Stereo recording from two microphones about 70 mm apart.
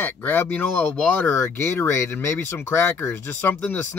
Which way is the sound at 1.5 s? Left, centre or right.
Left.